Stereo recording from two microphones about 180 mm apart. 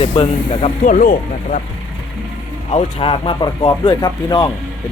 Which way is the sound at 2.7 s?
30° left (ahead or behind).